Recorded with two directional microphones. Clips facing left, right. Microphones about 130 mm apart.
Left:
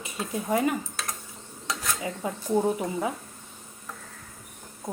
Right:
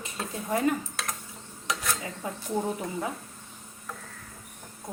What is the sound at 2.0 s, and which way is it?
Speech, 20° left (ahead or behind).